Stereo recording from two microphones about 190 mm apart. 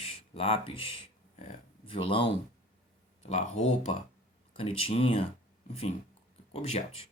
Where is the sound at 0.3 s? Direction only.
30° left (ahead or behind).